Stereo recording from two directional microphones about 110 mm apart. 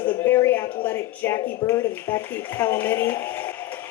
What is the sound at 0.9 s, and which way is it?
A woman's voice, 20° left (ahead or behind).